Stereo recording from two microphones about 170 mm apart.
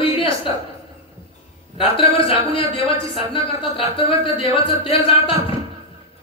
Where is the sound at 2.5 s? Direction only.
30° left (ahead or behind).